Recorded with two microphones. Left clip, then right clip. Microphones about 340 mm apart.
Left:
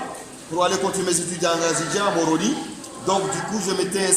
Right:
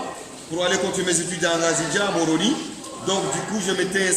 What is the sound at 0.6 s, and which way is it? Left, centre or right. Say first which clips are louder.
A man's voice: left 1 dB; centre.